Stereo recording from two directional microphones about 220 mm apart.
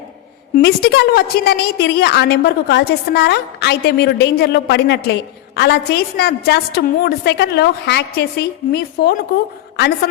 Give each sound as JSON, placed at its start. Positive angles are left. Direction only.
{"t": 0.5, "sound": "a woman's voice", "side_deg": 45}